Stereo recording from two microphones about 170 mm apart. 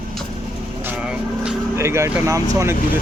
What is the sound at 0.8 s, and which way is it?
Vehicle, 5° right (ahead or behind).